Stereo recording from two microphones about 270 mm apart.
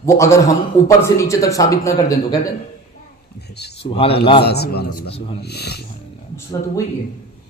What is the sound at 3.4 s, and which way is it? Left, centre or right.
Speech, left.